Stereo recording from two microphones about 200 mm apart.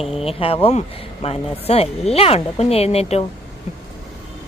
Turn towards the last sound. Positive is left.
turn(degrees=30)  # may be behind; listen again after turning